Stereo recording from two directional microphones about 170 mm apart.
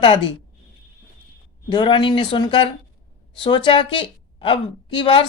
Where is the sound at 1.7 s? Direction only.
30° left (ahead or behind).